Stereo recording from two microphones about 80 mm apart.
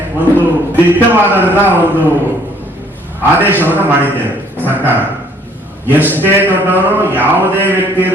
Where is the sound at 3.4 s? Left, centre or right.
Right.